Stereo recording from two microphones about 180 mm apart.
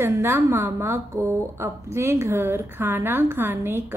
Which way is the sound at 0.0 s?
15° right (ahead or behind).